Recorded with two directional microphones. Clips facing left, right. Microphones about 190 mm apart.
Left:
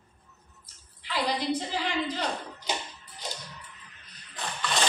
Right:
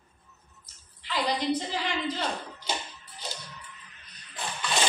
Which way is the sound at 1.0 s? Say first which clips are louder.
Right 1 dB; 10° left (ahead or behind).